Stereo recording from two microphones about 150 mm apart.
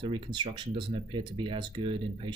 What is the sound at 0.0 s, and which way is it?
Speech, 35° right (ahead or behind).